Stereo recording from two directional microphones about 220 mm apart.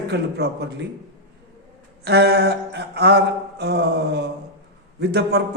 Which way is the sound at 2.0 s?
50° right (ahead or behind).